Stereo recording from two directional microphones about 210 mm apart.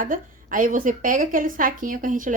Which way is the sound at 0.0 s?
40° right (ahead or behind).